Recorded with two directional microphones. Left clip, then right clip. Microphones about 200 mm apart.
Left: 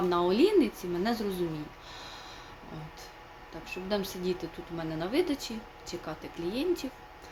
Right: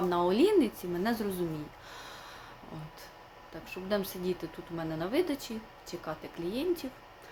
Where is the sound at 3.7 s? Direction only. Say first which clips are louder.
Even; 10° right (ahead or behind).